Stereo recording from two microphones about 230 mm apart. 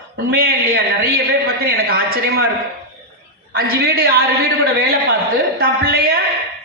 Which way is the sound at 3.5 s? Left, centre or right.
Right.